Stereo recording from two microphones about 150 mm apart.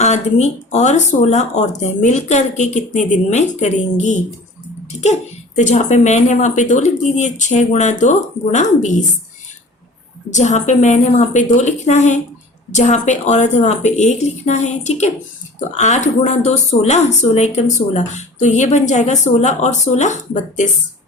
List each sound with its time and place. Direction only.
0.0 s speech: 50° left (ahead or behind)
5.5 s speech: 50° left (ahead or behind)
10.3 s speech: 50° left (ahead or behind)